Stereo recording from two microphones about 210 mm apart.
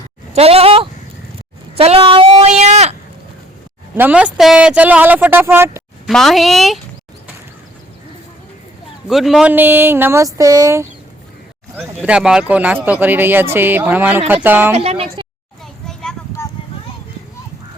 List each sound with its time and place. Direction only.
0.3 s speech: 30° right (ahead or behind)
1.7 s a sound: 30° right (ahead or behind)
3.9 s speech: 5° right (ahead or behind)
6.1 s a woman's voice: centre (ahead or behind)
9.0 s speech: centre (ahead or behind)
12.0 s speech: 5° right (ahead or behind)
14.7 s speech: 30° right (ahead or behind)
15.9 s a sound: centre (ahead or behind)
16.4 s a sound: 15° left (ahead or behind)